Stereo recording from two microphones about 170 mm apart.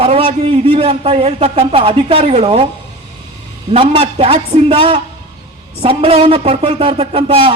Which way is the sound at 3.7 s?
30° right (ahead or behind).